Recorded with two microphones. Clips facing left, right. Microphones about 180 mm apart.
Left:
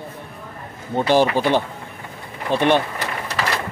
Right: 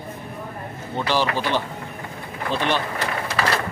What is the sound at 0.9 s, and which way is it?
Speech, 50° left (ahead or behind).